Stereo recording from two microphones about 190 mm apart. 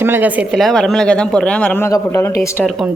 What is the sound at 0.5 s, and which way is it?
Speech, centre (ahead or behind).